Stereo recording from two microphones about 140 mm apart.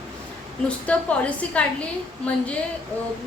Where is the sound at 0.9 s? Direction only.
10° left (ahead or behind).